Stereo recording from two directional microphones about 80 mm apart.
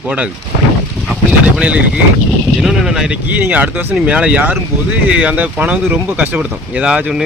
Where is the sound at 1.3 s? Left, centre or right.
Centre.